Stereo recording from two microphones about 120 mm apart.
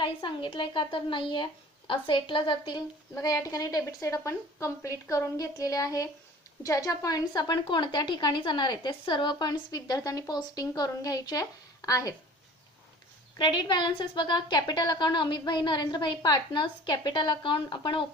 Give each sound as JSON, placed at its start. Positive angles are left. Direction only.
{"t": 0.0, "sound": "a woman's voice", "side_deg": 40}
{"t": 13.4, "sound": "a woman's voice", "side_deg": 40}